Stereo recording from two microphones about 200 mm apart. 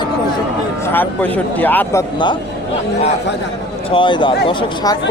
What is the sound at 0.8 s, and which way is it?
Speech, 10° left (ahead or behind).